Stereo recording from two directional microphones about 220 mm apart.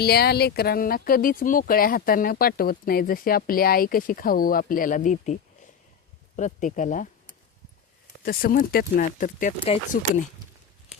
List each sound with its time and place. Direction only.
0.0 s speech: 45° left (ahead or behind)
8.2 s speech: 40° left (ahead or behind)